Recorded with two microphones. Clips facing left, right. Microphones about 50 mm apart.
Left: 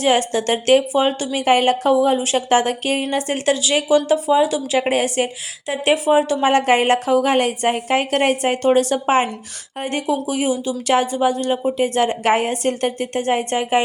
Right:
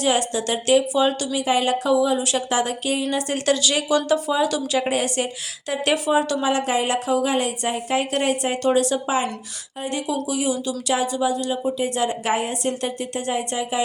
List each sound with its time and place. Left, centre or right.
0.0 s speech: left
1.5 s a woman's voice: left
4.8 s a woman's voice: left
6.4 s a woman's voice: left
10.8 s a woman's voice: left